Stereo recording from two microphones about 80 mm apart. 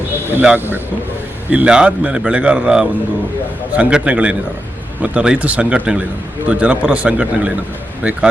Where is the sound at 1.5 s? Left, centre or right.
Centre.